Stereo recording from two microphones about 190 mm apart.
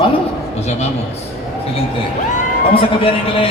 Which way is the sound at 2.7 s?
30° left (ahead or behind).